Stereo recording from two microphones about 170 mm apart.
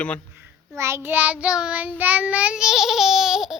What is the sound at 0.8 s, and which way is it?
Child singing, 15° right (ahead or behind).